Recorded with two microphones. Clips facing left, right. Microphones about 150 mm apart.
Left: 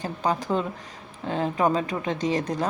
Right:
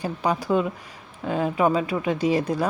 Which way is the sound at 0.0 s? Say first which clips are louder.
Right 1 dB; 10° right (ahead or behind).